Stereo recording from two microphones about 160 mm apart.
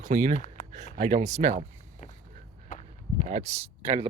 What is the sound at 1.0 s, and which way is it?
Speech, 45° right (ahead or behind).